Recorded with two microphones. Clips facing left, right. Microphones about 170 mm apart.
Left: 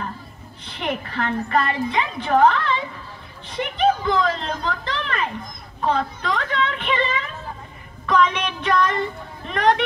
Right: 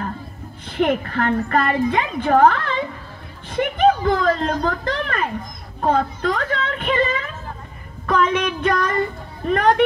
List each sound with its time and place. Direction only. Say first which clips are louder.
0.7 s a woman's voice: right 8 dB; 50° right (ahead or behind)